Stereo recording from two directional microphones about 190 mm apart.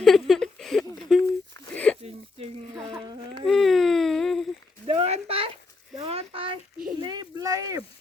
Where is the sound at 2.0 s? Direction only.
30° right (ahead or behind).